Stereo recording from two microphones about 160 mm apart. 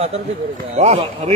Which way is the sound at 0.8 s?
40° right (ahead or behind).